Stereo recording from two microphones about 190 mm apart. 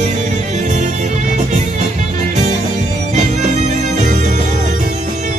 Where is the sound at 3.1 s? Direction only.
40° right (ahead or behind).